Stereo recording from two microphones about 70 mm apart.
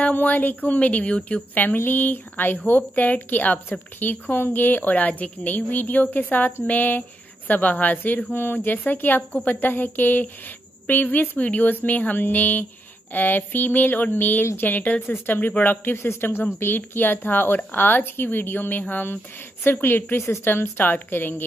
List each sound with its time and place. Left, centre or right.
0.0 s a woman's voice: left